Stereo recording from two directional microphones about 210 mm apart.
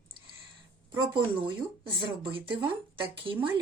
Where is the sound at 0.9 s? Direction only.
20° right (ahead or behind).